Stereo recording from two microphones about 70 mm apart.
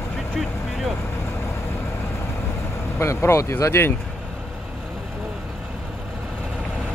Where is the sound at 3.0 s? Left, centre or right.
Left.